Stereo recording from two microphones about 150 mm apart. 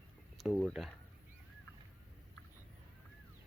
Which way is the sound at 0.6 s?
Centre (ahead or behind).